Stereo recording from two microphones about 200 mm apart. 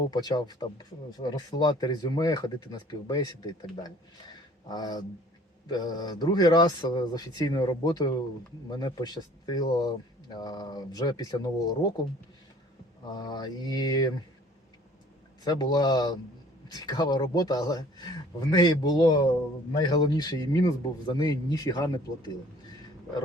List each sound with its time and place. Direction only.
0.1 s speech: 20° left (ahead or behind)
13.2 s speech: 20° left (ahead or behind)
15.4 s speech: 20° left (ahead or behind)